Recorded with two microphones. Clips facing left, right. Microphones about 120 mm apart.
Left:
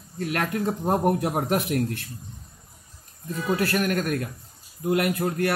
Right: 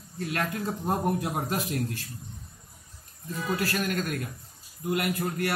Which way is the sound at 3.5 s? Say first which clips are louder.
Left 5 dB; 60° left (ahead or behind).